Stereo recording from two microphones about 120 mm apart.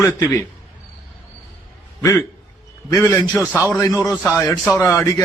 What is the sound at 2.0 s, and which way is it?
A man's voice, 25° left (ahead or behind).